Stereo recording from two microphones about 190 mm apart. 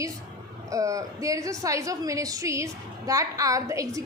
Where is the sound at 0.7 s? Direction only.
15° right (ahead or behind).